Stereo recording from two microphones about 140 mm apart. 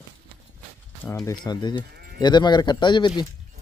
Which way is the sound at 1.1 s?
25° left (ahead or behind).